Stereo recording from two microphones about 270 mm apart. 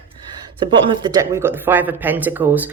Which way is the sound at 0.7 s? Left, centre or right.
Centre.